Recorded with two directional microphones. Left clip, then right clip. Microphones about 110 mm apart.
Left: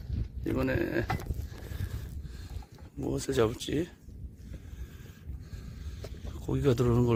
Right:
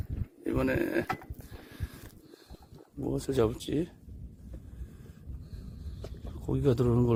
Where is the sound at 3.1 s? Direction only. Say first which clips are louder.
Even; 15° right (ahead or behind).